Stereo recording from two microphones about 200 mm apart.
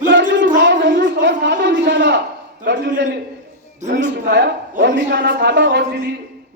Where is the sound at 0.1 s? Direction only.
70° right (ahead or behind).